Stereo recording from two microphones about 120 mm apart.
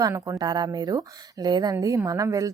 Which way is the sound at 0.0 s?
30° right (ahead or behind).